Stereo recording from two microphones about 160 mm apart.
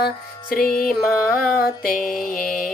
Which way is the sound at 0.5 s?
65° left (ahead or behind).